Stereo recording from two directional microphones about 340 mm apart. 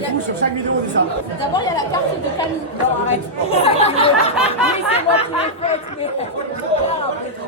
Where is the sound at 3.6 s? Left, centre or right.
Centre.